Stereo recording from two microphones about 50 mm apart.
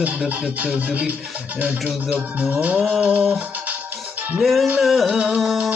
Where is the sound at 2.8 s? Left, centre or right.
Centre.